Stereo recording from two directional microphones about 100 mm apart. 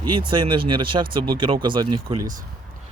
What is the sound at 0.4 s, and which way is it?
Speech, 60° right (ahead or behind).